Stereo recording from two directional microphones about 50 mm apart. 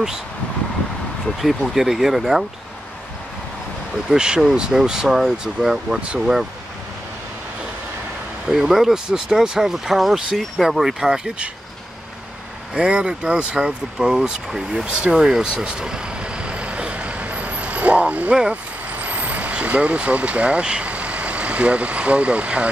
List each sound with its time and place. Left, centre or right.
1.4 s speech: centre
4.1 s speech: centre
8.5 s speech: centre
12.7 s speech: centre
15.0 s vehicle: centre